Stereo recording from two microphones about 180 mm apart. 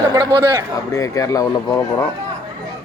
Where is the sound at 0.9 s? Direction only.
15° left (ahead or behind).